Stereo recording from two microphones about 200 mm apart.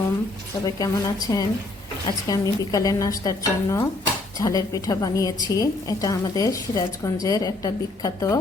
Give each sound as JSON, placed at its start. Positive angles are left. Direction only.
{"t": 0.6, "sound": "a woman's voice", "side_deg": 20}